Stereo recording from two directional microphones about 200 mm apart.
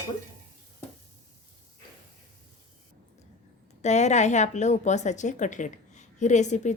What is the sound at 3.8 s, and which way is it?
A woman's voice, 35° left (ahead or behind).